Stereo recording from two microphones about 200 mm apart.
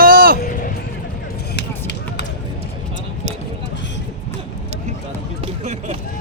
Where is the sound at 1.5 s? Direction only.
60° left (ahead or behind).